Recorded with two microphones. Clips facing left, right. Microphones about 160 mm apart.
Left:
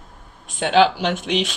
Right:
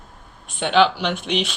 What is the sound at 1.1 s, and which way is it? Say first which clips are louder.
Speech: left 2 dB; 40° left (ahead or behind).